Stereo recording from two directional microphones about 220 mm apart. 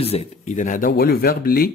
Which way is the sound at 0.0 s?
25° left (ahead or behind).